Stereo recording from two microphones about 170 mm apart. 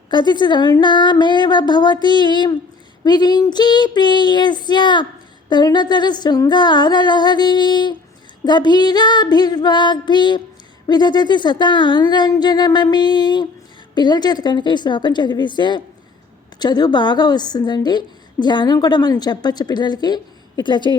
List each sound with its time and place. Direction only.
0.1 s a woman's voice: 25° left (ahead or behind)